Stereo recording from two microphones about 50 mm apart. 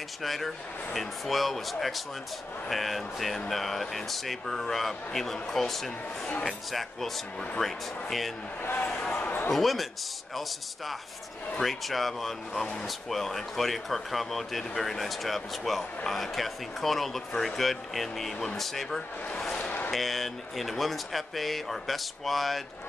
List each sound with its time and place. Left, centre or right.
0.2 s speech: centre
8.8 s speech: left
9.5 s speech: centre
11.6 s speech: centre